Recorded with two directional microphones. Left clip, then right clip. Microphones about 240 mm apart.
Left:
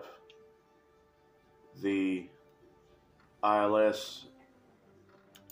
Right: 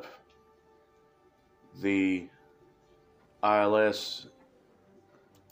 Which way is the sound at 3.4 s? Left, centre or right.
Centre.